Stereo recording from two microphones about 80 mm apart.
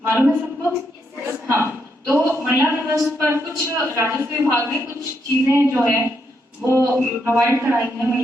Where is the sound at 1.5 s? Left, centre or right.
Right.